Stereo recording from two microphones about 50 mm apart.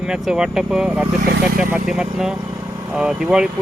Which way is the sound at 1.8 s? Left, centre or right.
Centre.